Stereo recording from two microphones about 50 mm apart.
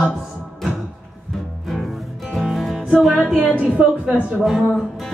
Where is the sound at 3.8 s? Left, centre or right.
Right.